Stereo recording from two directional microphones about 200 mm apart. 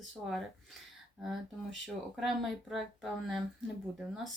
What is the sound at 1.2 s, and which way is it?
Speech, centre (ahead or behind).